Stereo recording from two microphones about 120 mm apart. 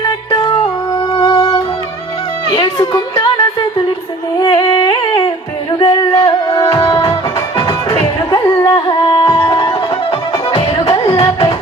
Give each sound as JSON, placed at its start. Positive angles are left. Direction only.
{"t": 1.1, "sound": "music", "side_deg": 30}
{"t": 8.6, "sound": "music", "side_deg": 40}